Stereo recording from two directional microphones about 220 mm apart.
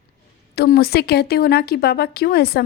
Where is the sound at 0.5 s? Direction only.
45° left (ahead or behind).